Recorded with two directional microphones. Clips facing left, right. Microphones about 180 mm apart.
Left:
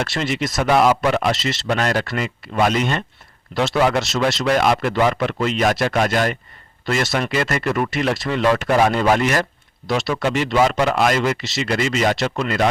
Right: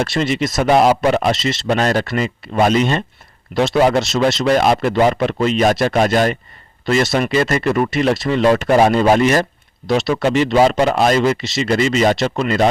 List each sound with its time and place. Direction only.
0.0 s speech: 20° right (ahead or behind)